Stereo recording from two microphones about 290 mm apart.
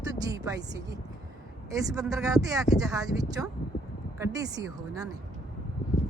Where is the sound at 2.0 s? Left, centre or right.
Centre.